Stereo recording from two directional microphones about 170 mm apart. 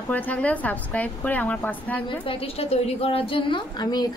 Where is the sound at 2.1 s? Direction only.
35° left (ahead or behind).